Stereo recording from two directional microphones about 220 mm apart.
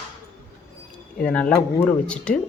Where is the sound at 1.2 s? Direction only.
5° left (ahead or behind).